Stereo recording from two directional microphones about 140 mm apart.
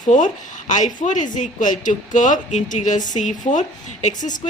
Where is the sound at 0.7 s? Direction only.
60° left (ahead or behind).